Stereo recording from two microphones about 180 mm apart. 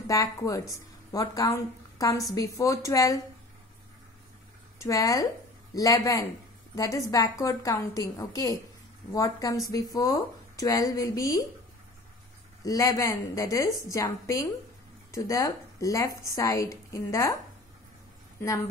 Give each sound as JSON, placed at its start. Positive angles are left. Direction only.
{"t": 0.0, "sound": "a woman's voice", "side_deg": 20}
{"t": 4.7, "sound": "a woman's voice", "side_deg": 20}
{"t": 12.6, "sound": "a woman's voice", "side_deg": 20}